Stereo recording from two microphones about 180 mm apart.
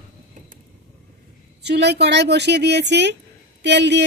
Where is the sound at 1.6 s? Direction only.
70° right (ahead or behind).